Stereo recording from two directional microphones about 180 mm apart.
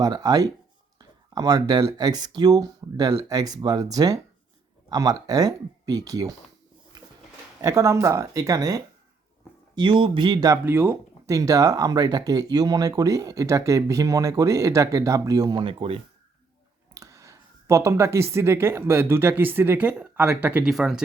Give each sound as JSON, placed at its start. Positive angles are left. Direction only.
{"t": 0.0, "sound": "speech", "side_deg": -20}
{"t": 7.6, "sound": "speech", "side_deg": -15}
{"t": 16.9, "sound": "a woman's voice", "side_deg": -20}